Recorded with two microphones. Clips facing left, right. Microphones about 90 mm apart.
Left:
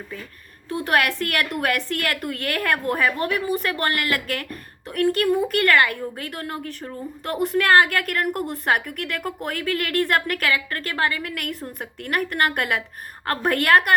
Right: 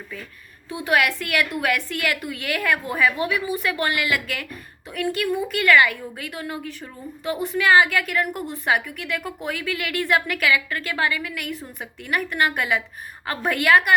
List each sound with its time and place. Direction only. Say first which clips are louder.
0.9 s a woman's voice: right 1 dB; 45° left (ahead or behind)